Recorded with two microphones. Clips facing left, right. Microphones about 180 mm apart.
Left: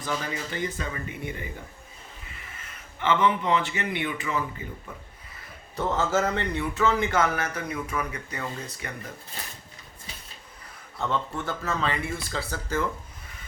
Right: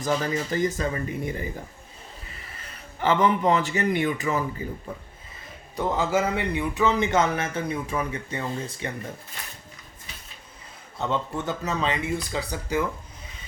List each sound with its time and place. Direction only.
0.0 s speech: 40° right (ahead or behind)
2.6 s a man's voice: 35° right (ahead or behind)
5.7 s speech: 15° right (ahead or behind)
10.9 s speech: 20° right (ahead or behind)